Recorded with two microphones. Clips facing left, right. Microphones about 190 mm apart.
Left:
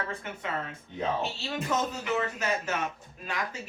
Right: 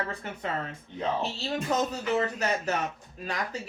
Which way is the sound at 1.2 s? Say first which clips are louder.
Right 2 dB; 35° right (ahead or behind).